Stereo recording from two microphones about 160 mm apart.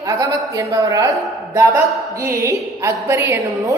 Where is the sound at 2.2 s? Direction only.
20° right (ahead or behind).